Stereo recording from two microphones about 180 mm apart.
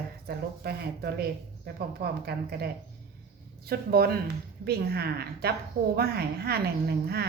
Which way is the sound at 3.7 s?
60° right (ahead or behind).